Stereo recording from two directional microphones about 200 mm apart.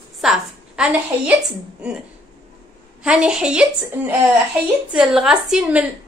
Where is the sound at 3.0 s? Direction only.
5° right (ahead or behind).